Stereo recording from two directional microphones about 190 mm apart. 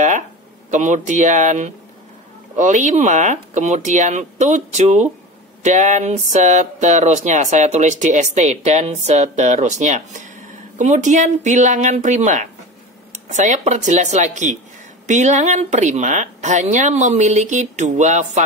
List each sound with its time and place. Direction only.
0.7 s speech: 40° right (ahead or behind)